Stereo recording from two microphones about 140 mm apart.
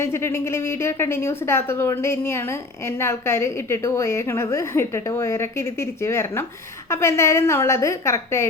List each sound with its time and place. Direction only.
0.0 s speech: 20° left (ahead or behind)